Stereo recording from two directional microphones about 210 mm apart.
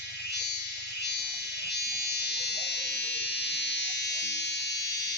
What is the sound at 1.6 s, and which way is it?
Electric shaver, 50° left (ahead or behind).